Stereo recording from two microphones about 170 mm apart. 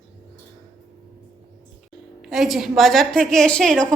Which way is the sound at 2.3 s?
Centre (ahead or behind).